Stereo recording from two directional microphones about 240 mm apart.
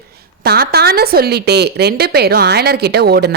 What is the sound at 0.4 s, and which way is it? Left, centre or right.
A woman's voice, right.